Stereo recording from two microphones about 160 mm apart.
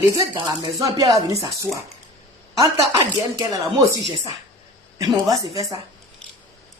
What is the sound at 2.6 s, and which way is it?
Speech, 20° right (ahead or behind).